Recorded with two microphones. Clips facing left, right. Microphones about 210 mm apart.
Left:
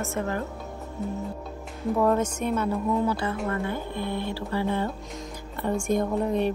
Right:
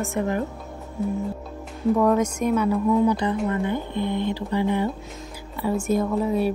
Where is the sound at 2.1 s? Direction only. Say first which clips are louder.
Right 4 dB; 10° right (ahead or behind).